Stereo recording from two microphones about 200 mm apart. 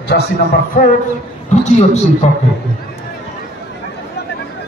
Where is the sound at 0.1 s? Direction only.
45° left (ahead or behind).